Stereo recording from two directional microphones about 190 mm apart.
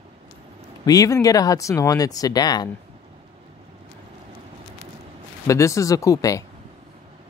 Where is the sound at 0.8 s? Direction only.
20° left (ahead or behind).